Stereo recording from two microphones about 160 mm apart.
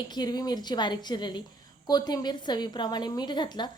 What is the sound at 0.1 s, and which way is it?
A woman's voice, 25° left (ahead or behind).